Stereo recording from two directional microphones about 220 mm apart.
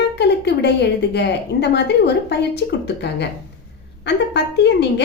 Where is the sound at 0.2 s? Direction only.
50° left (ahead or behind).